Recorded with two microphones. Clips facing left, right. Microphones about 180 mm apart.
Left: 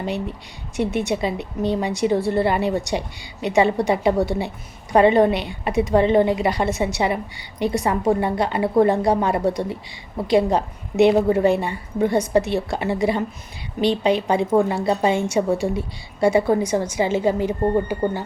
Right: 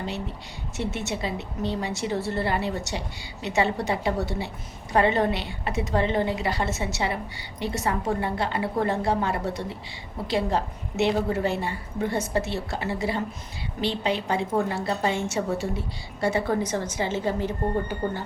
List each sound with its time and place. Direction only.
0.8 s a woman's voice: 15° left (ahead or behind)